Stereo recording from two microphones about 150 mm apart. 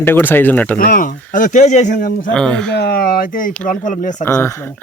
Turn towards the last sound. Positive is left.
turn(degrees=15)  # may be behind; listen again after turning